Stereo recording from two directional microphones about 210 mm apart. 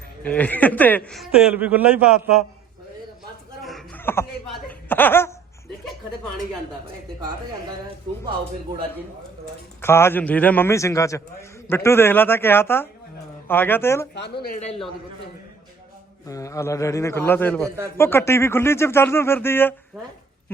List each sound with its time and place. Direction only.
0.2 s a man's voice: 5° left (ahead or behind)
3.6 s a sound: centre (ahead or behind)
4.7 s chuckle: 10° left (ahead or behind)
9.8 s a man's voice: 10° left (ahead or behind)
14.1 s a woman's voice: 50° left (ahead or behind)
14.4 s a man's voice: 35° left (ahead or behind)
16.2 s a man's voice: 15° left (ahead or behind)